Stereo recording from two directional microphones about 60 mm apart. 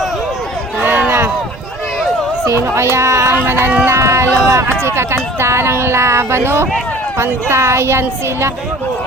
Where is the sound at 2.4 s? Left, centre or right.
Right.